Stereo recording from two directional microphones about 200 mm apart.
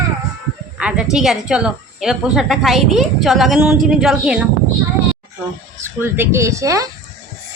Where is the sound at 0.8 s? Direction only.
5° right (ahead or behind).